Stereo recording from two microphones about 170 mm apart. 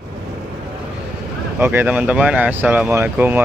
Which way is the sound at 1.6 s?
10° right (ahead or behind).